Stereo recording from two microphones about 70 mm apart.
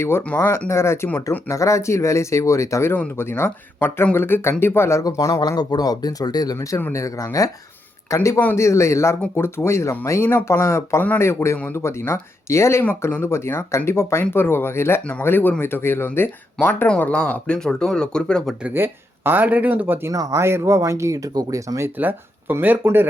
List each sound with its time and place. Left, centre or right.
0.3 s speech: left
1.5 s speech: left
3.2 s speech: left
5.0 s speech: left
5.4 s speech: left
11.5 s speech: left
11.8 s speech: left
17.0 s speech: centre
18.7 s speech: right
20.1 s speech: right
20.4 s speech: right
21.9 s speech: right